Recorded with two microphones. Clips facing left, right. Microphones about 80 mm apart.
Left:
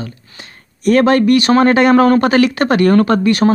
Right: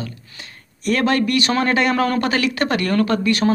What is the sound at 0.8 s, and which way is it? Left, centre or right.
A man's voice, left.